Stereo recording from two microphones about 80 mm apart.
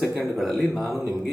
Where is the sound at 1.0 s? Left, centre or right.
Right.